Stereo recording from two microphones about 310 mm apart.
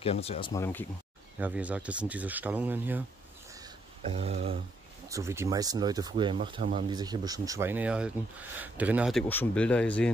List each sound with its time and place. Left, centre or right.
0.0 s speech: centre
1.4 s speech: centre
4.0 s speech: centre
5.1 s speech: centre